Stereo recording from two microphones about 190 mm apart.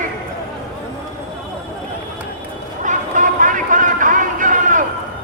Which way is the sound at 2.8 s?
40° right (ahead or behind).